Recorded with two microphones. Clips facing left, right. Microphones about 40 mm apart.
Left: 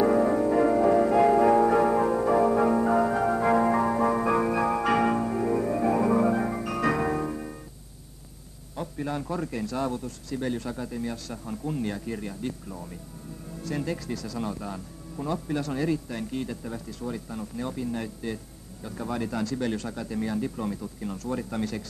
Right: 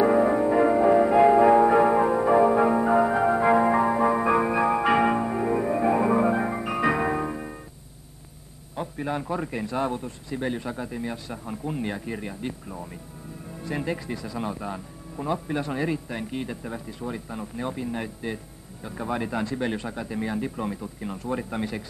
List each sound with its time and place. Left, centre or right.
0.0 s music: right
8.7 s speech: centre